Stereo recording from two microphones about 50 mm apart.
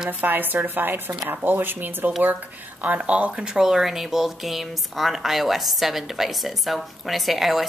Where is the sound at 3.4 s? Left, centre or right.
Centre.